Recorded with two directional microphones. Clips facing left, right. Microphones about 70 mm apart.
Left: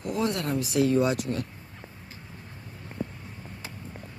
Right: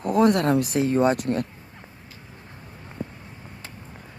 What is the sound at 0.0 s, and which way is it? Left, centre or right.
Speech, right.